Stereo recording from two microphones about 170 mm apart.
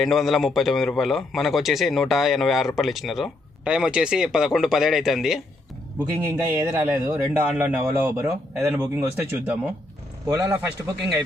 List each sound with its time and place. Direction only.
0.0 s a man's voice: centre (ahead or behind)
6.2 s a man's voice: 15° right (ahead or behind)